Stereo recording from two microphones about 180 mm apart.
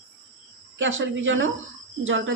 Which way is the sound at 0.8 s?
90° right.